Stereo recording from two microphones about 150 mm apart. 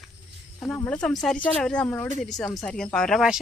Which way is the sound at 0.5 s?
5° left (ahead or behind).